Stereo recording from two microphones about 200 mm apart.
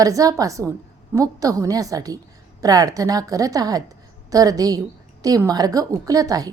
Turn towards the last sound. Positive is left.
turn(degrees=-15)  # may be behind; listen again after turning